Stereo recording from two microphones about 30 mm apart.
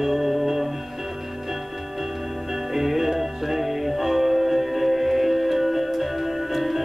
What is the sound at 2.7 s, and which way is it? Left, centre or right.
Music, centre.